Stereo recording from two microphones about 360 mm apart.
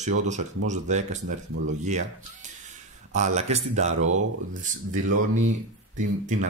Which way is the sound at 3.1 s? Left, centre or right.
Centre.